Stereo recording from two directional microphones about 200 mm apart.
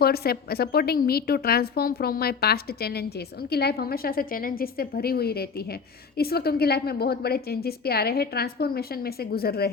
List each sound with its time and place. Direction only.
0.0 s a woman's voice: 50° left (ahead or behind)